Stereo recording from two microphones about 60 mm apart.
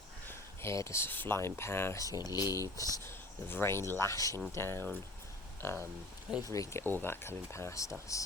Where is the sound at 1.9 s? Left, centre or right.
Left.